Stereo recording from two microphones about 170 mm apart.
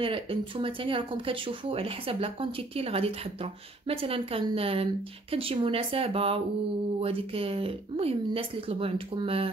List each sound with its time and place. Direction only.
0.0 s speech: 30° right (ahead or behind)